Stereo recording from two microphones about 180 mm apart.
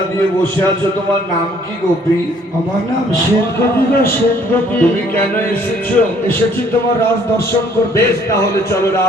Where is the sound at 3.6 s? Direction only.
10° left (ahead or behind).